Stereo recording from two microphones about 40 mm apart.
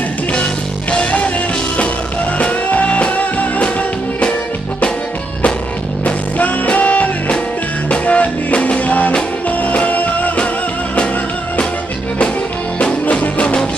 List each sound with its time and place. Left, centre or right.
0.9 s music: left
2.3 s music: left
6.0 s music: left
13.0 s music: left